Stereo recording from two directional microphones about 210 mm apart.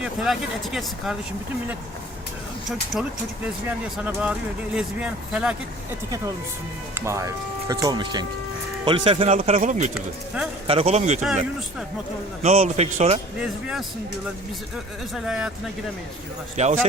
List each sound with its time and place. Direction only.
0.0 s speech: centre (ahead or behind)
2.6 s speech: centre (ahead or behind)
7.0 s speech: 15° right (ahead or behind); by 11.2 s 35° right (ahead or behind)
12.4 s speech: 30° right (ahead or behind)
13.4 s speech: 5° right (ahead or behind)
15.1 s speech: 5° right (ahead or behind)
16.6 s speech: 35° right (ahead or behind)